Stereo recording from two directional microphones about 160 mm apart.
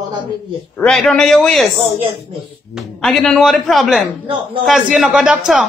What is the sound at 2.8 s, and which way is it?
A woman's voice, centre (ahead or behind).